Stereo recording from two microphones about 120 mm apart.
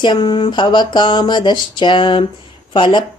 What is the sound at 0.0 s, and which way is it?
Speech, 40° left (ahead or behind).